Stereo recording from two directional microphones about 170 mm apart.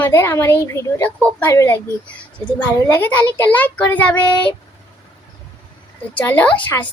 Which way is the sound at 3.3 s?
10° left (ahead or behind).